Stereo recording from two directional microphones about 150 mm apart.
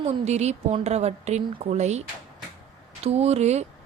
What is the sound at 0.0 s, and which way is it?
Speech, 50° right (ahead or behind).